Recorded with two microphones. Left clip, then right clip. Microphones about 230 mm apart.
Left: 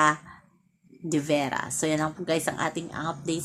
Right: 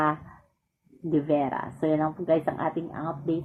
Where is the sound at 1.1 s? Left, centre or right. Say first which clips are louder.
Right 1 dB; left.